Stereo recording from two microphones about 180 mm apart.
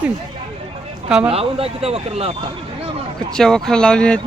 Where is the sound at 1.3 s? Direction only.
30° right (ahead or behind).